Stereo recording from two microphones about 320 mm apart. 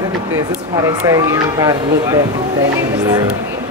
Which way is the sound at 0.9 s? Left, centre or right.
Centre.